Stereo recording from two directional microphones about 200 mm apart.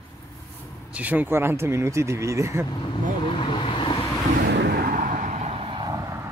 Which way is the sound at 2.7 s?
25° left (ahead or behind).